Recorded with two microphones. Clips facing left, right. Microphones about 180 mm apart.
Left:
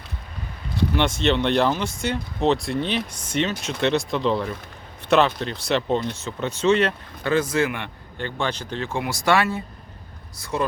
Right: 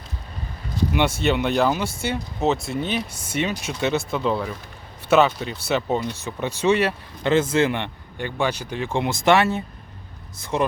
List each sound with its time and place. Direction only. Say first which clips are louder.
0.9 s speech: even; 10° right (ahead or behind)
7.3 s speech: right 2 dB; 25° right (ahead or behind)
8.2 s speech: right 2 dB; 10° right (ahead or behind)